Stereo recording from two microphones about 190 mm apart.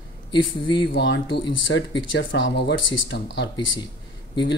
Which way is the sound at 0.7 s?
25° left (ahead or behind).